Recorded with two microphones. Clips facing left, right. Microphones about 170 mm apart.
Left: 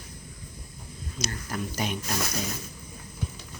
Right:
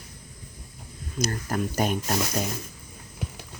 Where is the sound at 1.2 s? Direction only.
45° right (ahead or behind).